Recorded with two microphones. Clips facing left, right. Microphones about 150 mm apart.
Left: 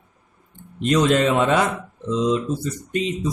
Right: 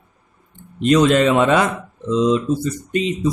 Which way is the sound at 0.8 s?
90° right.